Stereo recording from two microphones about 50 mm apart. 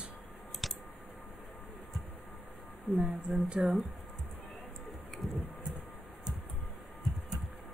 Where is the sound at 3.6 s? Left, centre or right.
Centre.